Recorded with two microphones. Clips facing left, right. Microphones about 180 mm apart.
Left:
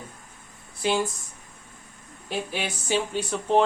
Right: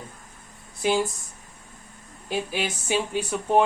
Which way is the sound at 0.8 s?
15° right (ahead or behind).